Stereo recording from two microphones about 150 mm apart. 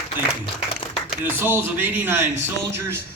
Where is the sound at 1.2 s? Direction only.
15° right (ahead or behind).